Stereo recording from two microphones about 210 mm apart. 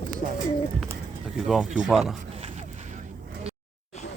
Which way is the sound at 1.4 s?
Centre (ahead or behind).